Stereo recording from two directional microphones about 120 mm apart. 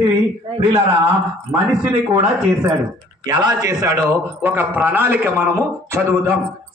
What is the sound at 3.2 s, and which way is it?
A man's voice, 35° right (ahead or behind).